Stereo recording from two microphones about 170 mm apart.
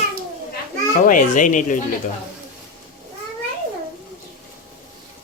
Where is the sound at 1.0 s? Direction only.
50° left (ahead or behind).